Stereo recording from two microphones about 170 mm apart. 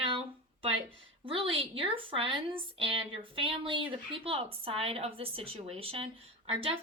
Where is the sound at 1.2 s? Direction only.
30° right (ahead or behind).